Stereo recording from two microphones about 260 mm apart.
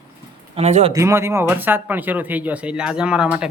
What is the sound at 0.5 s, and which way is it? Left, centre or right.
Speech, right.